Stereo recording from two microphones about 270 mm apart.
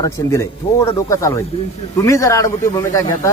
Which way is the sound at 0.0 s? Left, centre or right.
Centre.